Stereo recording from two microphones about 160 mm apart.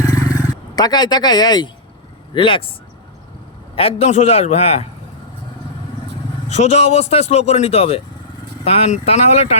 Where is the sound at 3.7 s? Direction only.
40° left (ahead or behind).